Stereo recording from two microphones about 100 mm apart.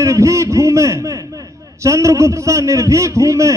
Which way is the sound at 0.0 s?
30° right (ahead or behind).